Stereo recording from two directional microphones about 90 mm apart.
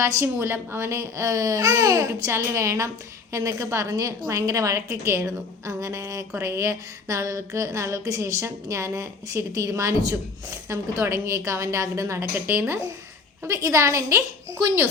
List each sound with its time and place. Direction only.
0.0 s a woman's voice: 35° right (ahead or behind)
13.5 s a woman's voice: 35° right (ahead or behind)